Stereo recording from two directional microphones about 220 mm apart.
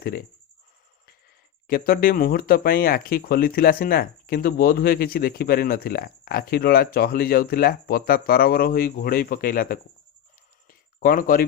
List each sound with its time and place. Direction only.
0.0 s speech: 45° left (ahead or behind)
1.6 s speech: 40° left (ahead or behind)
10.7 s a sound: 40° left (ahead or behind)